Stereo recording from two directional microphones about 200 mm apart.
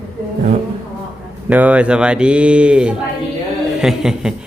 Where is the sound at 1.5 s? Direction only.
5° right (ahead or behind).